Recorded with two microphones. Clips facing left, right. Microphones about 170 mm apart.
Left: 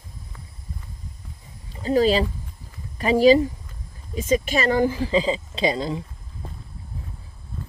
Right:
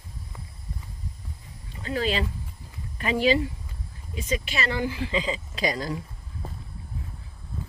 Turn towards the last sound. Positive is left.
turn(degrees=25)  # may be behind; listen again after turning